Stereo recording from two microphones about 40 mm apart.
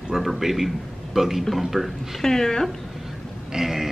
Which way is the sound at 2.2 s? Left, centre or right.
Centre.